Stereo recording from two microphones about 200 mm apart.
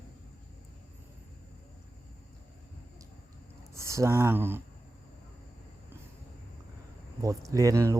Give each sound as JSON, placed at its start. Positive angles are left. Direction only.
{"t": 3.8, "sound": "speech", "side_deg": -15}
{"t": 7.2, "sound": "speech", "side_deg": -15}